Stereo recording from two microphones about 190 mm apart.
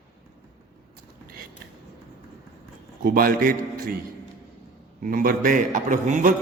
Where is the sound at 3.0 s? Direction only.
50° right (ahead or behind).